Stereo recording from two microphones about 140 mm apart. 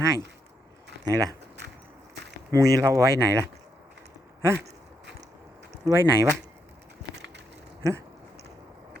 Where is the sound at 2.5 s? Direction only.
20° right (ahead or behind).